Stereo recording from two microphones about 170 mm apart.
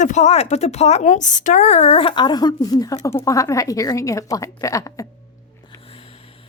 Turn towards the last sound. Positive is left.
turn(degrees=20)  # may be behind; listen again after turning